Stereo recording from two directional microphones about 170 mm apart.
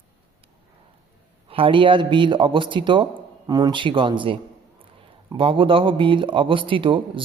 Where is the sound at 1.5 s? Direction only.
30° right (ahead or behind).